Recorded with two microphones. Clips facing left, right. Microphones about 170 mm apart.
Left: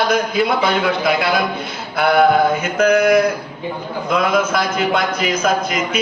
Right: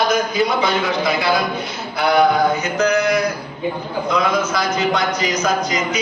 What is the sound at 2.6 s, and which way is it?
Mantra, 55° left (ahead or behind).